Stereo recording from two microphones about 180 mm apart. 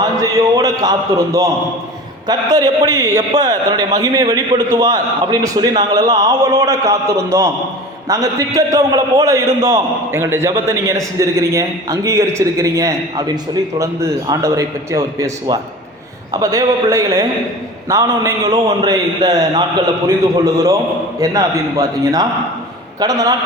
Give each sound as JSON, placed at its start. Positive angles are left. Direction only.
{"t": 0.0, "sound": "a man's voice", "side_deg": -20}